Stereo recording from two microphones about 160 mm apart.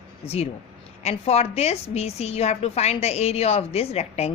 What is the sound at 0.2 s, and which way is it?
A woman's voice, 40° left (ahead or behind).